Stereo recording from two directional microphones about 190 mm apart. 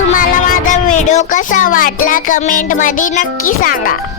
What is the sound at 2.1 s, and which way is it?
A child's voice, 45° left (ahead or behind).